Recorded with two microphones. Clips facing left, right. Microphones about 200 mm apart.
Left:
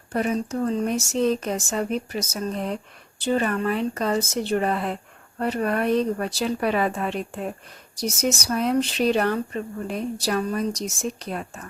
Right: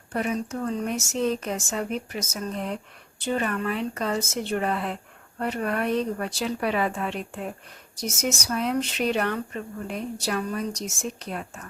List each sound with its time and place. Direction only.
0.1 s speech: 35° left (ahead or behind)